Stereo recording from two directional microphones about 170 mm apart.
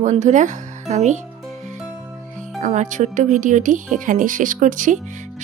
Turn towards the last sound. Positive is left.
turn(degrees=-50)  # may be behind; listen again after turning